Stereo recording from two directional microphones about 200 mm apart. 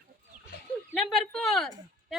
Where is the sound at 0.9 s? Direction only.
Centre (ahead or behind).